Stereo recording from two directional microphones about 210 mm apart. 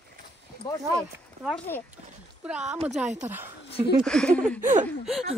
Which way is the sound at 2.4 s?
5° right (ahead or behind).